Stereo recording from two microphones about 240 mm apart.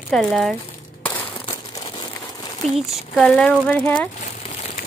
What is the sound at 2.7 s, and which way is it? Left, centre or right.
Speech, centre.